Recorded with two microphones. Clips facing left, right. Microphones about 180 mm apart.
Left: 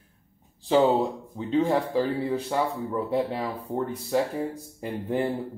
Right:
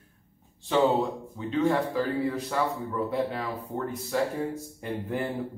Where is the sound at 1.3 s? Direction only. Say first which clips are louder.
Left 2 dB; 30° left (ahead or behind).